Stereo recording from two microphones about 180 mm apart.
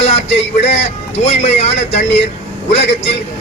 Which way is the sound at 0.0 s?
35° left (ahead or behind).